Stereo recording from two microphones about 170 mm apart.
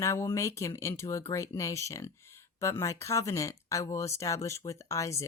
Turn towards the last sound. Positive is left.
turn(degrees=20)  # may be behind; listen again after turning